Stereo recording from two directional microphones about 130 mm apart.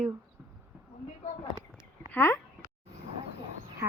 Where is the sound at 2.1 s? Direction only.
20° left (ahead or behind).